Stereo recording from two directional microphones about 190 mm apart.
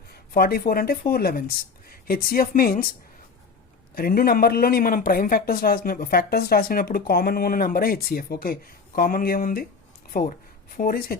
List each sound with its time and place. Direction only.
0.1 s speech: 55° left (ahead or behind)
3.9 s a man's voice: 50° left (ahead or behind)